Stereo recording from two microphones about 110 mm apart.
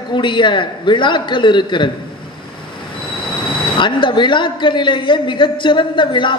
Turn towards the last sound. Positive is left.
turn(degrees=45)  # may be behind; listen again after turning